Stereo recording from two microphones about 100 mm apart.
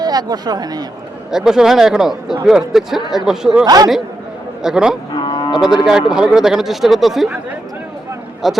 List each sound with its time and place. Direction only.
0.0 s speech: 40° right (ahead or behind)
1.3 s speech: 5° right (ahead or behind)
3.6 s speech: 40° right (ahead or behind)
4.6 s speech: 5° right (ahead or behind)
5.1 s moo: 50° left (ahead or behind)
5.6 s speech: 5° right (ahead or behind)
8.4 s speech: centre (ahead or behind)